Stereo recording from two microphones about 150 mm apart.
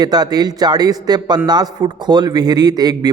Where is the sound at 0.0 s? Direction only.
25° right (ahead or behind).